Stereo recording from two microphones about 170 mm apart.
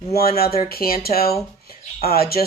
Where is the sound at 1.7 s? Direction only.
60° left (ahead or behind).